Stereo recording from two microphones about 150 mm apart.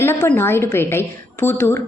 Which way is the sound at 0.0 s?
15° left (ahead or behind).